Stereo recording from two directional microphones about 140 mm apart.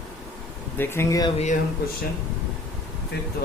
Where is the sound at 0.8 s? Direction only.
15° left (ahead or behind).